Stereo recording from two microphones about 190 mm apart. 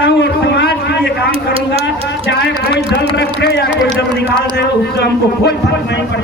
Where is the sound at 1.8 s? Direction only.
65° left (ahead or behind).